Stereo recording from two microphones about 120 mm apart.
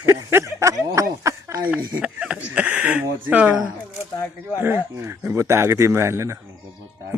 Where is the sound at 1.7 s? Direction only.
10° right (ahead or behind).